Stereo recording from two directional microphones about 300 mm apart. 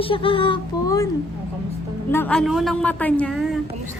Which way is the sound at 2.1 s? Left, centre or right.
Centre.